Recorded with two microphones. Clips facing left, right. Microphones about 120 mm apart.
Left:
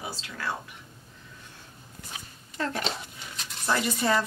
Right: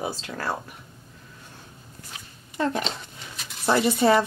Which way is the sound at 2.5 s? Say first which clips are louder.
Right 4 dB; 20° right (ahead or behind).